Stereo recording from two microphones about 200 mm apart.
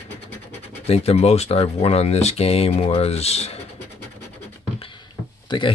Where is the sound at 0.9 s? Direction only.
30° left (ahead or behind).